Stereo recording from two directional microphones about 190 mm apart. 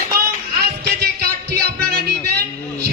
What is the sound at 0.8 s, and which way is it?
Music, 55° right (ahead or behind).